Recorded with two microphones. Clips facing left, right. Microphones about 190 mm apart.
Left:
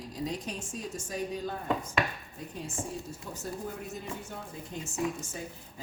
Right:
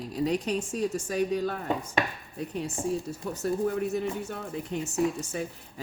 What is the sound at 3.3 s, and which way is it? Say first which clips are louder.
A woman's voice: right 11 dB; 65° right (ahead or behind).